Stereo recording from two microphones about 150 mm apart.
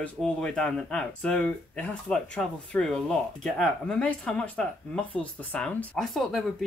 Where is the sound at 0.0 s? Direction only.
5° left (ahead or behind).